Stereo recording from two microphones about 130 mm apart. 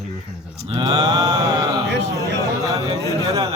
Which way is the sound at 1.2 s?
25° right (ahead or behind).